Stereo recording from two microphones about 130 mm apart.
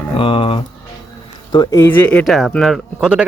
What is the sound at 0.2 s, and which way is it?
Speech, 40° left (ahead or behind).